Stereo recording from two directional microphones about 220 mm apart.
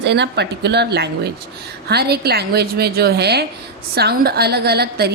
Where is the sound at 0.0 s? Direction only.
50° right (ahead or behind).